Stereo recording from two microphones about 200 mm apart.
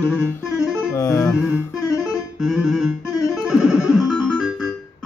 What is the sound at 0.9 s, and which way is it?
Music, 15° left (ahead or behind).